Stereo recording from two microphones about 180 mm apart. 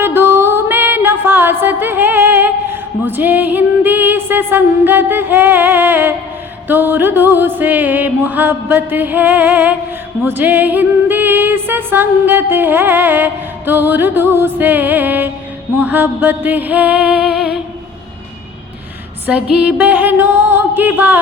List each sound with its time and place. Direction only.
0.0 s music: 15° right (ahead or behind)
19.3 s music: 5° right (ahead or behind)